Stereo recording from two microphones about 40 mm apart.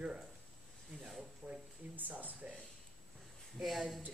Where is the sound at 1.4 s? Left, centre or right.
Right.